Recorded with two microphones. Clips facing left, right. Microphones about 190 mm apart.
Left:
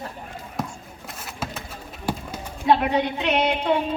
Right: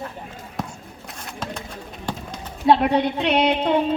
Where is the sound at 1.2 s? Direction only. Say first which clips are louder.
Right 1 dB; 5° left (ahead or behind).